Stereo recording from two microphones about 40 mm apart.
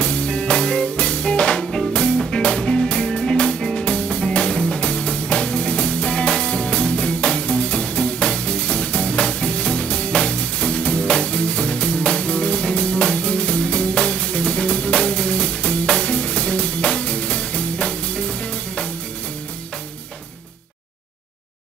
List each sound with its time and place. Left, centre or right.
0.0 s music: left
1.6 s music: centre
2.3 s music: left